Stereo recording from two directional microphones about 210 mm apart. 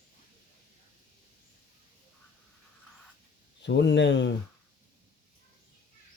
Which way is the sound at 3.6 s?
55° left (ahead or behind).